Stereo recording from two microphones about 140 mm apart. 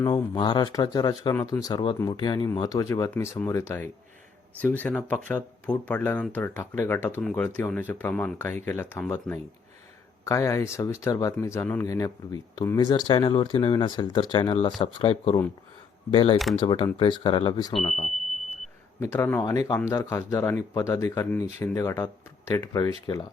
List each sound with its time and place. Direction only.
0.0 s speech: 30° left (ahead or behind); by 7.2 s 15° left (ahead or behind)
7.2 s speech: 5° left (ahead or behind)
10.2 s speech: 20° left (ahead or behind); by 17.5 s 40° left (ahead or behind)
17.8 s speech: 55° left (ahead or behind)
19.1 s speech: 15° left (ahead or behind)
19.5 s speech: 30° left (ahead or behind)